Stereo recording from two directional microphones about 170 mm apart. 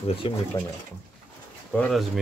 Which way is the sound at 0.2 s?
35° left (ahead or behind).